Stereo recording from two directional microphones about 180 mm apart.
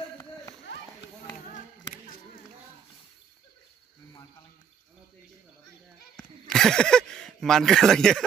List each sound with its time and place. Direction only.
0.7 s run: 80° left
6.1 s speech: centre (ahead or behind)